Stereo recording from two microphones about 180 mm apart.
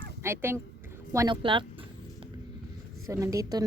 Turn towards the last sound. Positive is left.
turn(degrees=-20)  # may be behind; listen again after turning